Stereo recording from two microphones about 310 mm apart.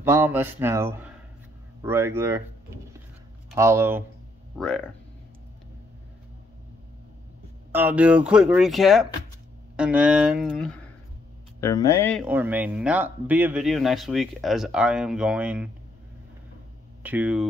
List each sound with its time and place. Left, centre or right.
0.0 s speech: centre
4.6 s speech: centre
7.7 s speech: centre
11.6 s speech: centre
17.0 s speech: centre